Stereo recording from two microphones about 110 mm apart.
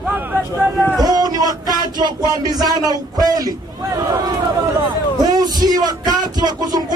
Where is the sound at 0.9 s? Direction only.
35° right (ahead or behind).